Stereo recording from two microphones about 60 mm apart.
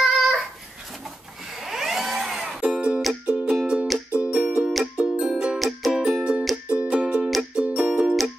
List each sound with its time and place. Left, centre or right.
0.0 s a sound: centre
1.5 s music: centre
2.6 s music: centre
3.7 s music: centre
4.1 s music: centre
4.6 s music: centre
5.6 s music: centre
5.9 s music: centre